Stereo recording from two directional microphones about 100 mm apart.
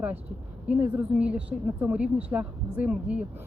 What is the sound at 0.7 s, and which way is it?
Speech, 15° right (ahead or behind).